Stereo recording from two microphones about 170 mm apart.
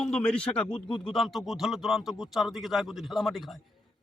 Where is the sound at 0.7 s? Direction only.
30° left (ahead or behind).